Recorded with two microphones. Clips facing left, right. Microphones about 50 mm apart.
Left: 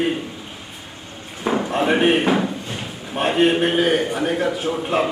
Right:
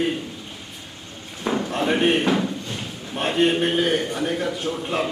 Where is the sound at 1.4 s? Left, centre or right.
Centre.